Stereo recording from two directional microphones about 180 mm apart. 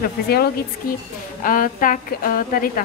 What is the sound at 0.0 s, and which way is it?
A woman's voice, 55° left (ahead or behind).